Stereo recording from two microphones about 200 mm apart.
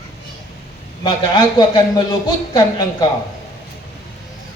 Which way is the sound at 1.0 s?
20° left (ahead or behind).